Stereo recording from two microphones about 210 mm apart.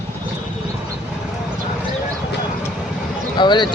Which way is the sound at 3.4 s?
20° left (ahead or behind).